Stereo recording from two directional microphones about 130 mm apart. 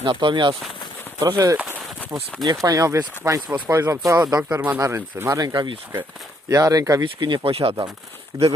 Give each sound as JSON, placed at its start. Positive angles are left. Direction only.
{"t": 0.0, "sound": "speech", "side_deg": -35}
{"t": 1.5, "sound": "speech", "side_deg": -10}
{"t": 2.1, "sound": "speech", "side_deg": -30}
{"t": 4.4, "sound": "speech", "side_deg": -10}
{"t": 5.4, "sound": "speech", "side_deg": -30}
{"t": 7.0, "sound": "speech", "side_deg": -35}
{"t": 8.3, "sound": "speech", "side_deg": -20}